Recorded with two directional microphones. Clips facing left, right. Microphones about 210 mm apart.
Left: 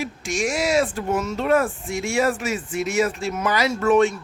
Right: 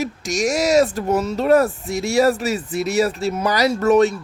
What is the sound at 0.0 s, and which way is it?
Speech, 40° right (ahead or behind).